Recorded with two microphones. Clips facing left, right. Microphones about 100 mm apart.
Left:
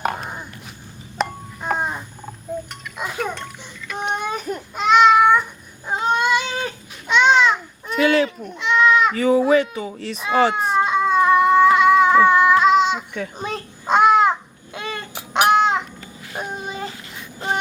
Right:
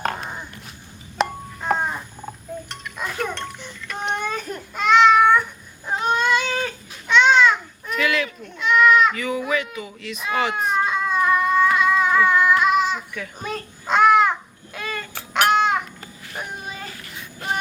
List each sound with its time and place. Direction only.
0.0 s a sound: 15° left (ahead or behind)
1.2 s a sound: centre (ahead or behind)
2.6 s music: 10° left (ahead or behind)
4.1 s baby cry: 15° left (ahead or behind)
5.9 s babbling: 20° left (ahead or behind)
8.4 s sheep: 25° left (ahead or behind)
16.3 s child singing: 25° left (ahead or behind)
17.4 s music: 25° left (ahead or behind)